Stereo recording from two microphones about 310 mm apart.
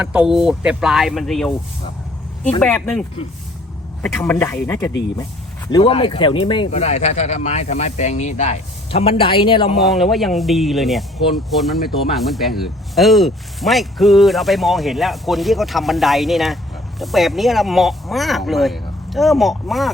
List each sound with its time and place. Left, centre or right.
0.0 s speech: centre
2.6 s speech: centre
9.8 s speech: centre